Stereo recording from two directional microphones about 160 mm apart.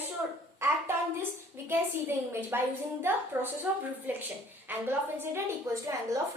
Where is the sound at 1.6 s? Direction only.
15° right (ahead or behind).